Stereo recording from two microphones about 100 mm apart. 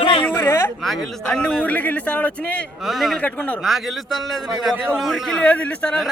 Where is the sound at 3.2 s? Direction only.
15° left (ahead or behind).